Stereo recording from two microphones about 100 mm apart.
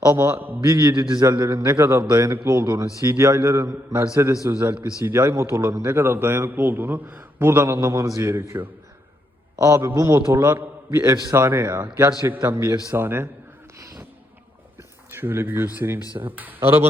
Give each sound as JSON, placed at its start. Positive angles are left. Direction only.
{"t": 0.2, "sound": "a man's voice", "side_deg": -25}
{"t": 0.7, "sound": "a man's voice", "side_deg": -35}
{"t": 13.7, "sound": "music", "side_deg": -30}
{"t": 15.1, "sound": "a man's voice", "side_deg": -25}